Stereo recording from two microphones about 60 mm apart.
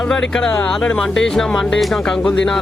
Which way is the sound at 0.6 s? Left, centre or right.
Centre.